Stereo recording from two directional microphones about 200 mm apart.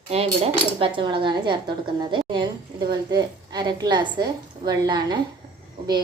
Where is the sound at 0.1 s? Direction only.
30° right (ahead or behind).